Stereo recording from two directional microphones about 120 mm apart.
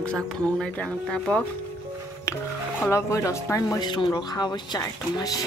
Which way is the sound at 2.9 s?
25° left (ahead or behind).